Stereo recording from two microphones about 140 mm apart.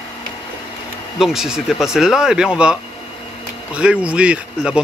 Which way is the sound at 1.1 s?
Centre (ahead or behind).